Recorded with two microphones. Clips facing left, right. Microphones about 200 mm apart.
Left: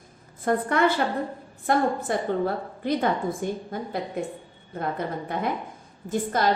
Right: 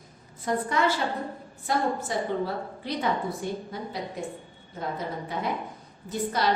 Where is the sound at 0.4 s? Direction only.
55° left (ahead or behind).